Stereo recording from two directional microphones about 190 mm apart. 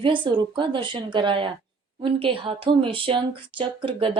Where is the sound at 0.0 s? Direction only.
25° right (ahead or behind).